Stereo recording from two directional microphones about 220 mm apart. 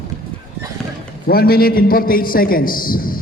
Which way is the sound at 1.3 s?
45° left (ahead or behind).